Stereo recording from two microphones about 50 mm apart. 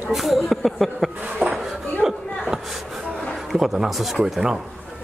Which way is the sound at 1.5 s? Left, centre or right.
Centre.